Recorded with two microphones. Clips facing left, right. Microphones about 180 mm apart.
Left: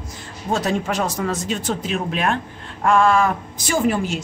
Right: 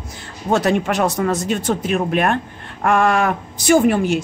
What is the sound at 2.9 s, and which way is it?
Speech, 65° right (ahead or behind).